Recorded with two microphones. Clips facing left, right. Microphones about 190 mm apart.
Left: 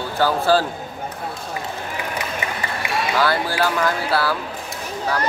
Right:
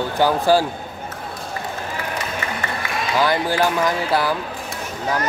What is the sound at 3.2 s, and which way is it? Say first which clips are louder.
Speech: right 3 dB; 15° right (ahead or behind).